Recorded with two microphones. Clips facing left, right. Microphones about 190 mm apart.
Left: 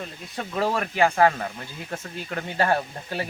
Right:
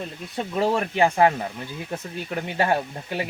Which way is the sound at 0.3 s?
20° right (ahead or behind).